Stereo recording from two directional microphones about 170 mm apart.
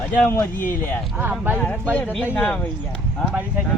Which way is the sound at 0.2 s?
15° left (ahead or behind).